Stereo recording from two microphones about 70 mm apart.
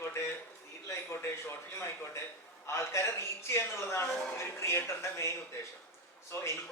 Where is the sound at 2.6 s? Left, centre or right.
Left.